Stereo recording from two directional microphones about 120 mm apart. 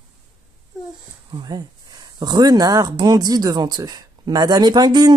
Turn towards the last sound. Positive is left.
turn(degrees=-35)  # may be behind; listen again after turning